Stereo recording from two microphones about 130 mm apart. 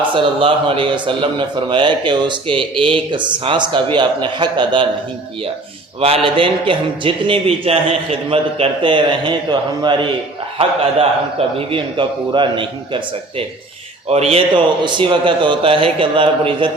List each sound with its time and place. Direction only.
0.1 s a man's voice: 40° right (ahead or behind)
6.2 s a man's voice: 45° right (ahead or behind)
14.1 s a man's voice: 50° right (ahead or behind)